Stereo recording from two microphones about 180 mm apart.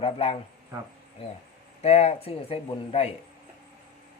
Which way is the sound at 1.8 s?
35° left (ahead or behind).